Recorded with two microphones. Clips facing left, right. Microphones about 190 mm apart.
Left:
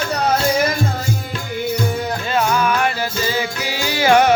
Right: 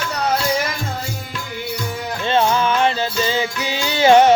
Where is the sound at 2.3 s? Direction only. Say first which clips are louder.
Right 2 dB; 25° right (ahead or behind).